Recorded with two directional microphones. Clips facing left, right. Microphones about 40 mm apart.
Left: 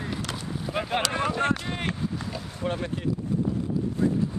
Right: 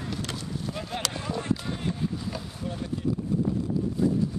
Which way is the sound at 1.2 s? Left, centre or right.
Left.